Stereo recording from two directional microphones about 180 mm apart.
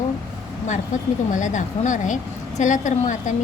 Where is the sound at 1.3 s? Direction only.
45° left (ahead or behind).